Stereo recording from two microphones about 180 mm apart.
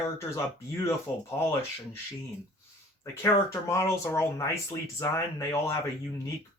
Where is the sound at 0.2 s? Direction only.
15° left (ahead or behind).